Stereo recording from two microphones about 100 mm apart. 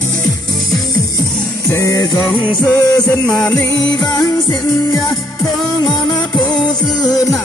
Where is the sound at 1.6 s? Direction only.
30° left (ahead or behind).